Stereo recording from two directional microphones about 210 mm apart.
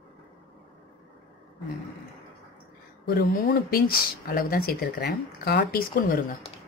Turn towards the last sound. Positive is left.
turn(degrees=45)  # may be behind; listen again after turning